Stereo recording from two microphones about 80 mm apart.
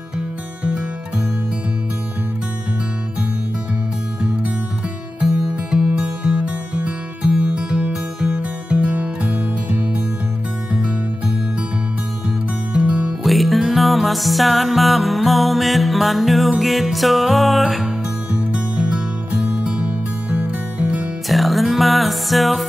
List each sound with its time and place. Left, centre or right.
0.7 s music: centre
5.2 s music: centre
12.7 s music: centre
13.2 s music: centre
18.3 s music: centre
21.3 s music: centre